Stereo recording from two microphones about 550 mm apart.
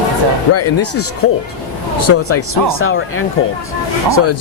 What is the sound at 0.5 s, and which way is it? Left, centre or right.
Speech, left.